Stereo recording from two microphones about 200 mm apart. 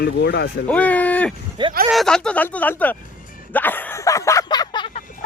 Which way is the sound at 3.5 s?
10° left (ahead or behind).